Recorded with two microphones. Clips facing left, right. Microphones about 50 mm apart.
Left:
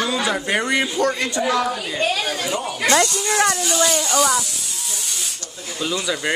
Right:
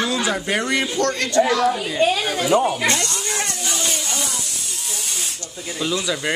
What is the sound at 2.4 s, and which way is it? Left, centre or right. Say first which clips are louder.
Speech: right 7 dB; right.